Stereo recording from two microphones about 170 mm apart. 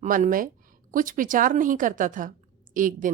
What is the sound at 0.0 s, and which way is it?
A woman's voice, 50° right (ahead or behind).